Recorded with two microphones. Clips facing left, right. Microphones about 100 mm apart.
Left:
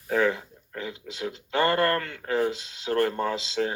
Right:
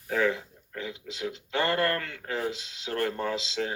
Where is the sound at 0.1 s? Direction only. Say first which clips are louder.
Left 3 dB; 30° left (ahead or behind).